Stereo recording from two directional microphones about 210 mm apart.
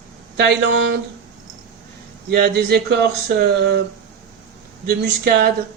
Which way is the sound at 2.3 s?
50° right (ahead or behind).